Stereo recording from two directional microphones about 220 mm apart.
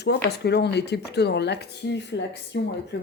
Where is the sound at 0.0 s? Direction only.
50° left (ahead or behind).